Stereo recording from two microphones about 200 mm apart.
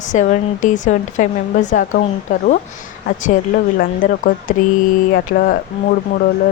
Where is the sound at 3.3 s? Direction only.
45° left (ahead or behind).